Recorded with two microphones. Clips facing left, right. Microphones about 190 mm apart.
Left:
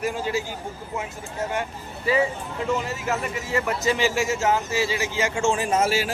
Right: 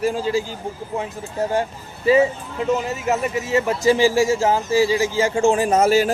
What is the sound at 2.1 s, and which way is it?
Speech, 25° right (ahead or behind).